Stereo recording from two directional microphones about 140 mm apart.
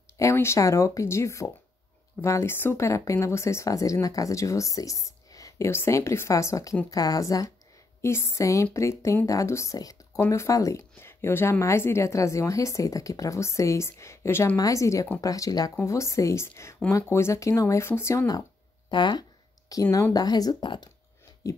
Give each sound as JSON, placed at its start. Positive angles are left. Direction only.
{"t": 0.2, "sound": "speech", "side_deg": 20}